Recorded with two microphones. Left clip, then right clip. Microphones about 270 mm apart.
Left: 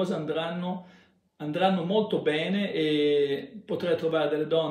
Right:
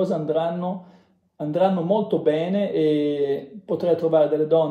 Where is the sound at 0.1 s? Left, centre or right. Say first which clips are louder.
Right 7 dB; centre.